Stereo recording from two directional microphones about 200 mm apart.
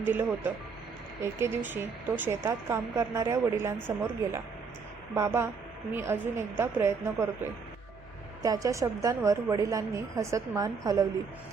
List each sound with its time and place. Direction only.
0.0 s a woman's voice: 10° right (ahead or behind)
8.4 s a woman's voice: 15° right (ahead or behind)